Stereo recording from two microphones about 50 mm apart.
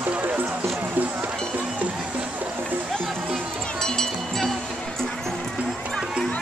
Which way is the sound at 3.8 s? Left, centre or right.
Centre.